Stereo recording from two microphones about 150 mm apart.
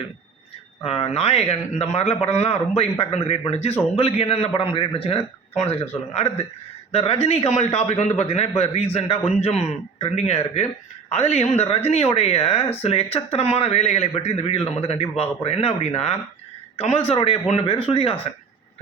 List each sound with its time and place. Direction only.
0.9 s a man's voice: 40° left (ahead or behind)